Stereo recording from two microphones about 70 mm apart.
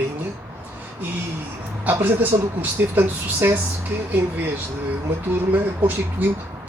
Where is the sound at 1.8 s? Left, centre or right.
Right.